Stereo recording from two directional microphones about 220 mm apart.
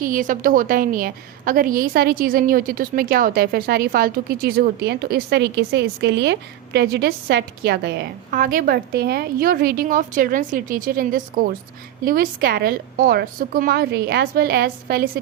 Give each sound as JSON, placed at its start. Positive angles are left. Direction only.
{"t": 0.0, "sound": "a woman's voice", "side_deg": -40}